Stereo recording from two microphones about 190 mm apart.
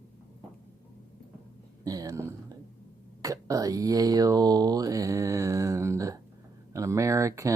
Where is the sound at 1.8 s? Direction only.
20° right (ahead or behind).